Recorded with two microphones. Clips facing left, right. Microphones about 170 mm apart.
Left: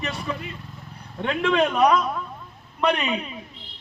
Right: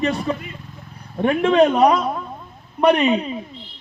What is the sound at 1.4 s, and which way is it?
A man's voice, 30° right (ahead or behind).